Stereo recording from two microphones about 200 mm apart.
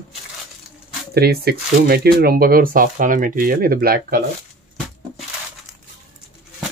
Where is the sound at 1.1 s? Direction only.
50° right (ahead or behind).